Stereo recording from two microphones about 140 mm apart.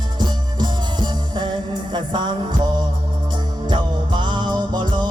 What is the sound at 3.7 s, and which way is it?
Music, 35° right (ahead or behind).